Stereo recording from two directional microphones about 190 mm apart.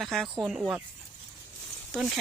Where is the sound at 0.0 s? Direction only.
Centre (ahead or behind).